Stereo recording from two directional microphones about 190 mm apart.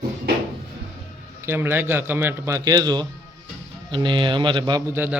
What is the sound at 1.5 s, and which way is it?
Speech, 10° right (ahead or behind).